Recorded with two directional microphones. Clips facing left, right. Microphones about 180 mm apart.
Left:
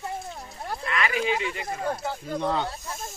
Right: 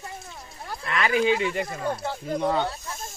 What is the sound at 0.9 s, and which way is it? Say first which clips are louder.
Speech: right 4 dB; 40° right (ahead or behind).